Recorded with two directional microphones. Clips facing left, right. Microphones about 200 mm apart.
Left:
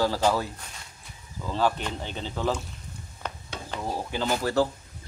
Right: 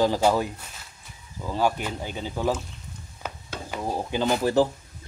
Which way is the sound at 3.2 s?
10° right (ahead or behind).